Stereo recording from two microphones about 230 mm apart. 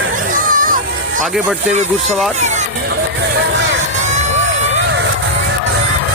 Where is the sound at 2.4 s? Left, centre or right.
Right.